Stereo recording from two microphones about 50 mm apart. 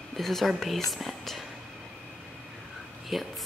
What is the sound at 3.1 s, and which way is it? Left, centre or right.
Speech, centre.